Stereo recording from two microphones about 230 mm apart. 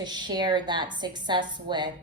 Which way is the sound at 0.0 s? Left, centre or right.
Centre.